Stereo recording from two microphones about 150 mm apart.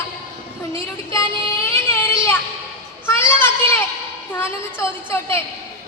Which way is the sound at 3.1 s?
15° left (ahead or behind).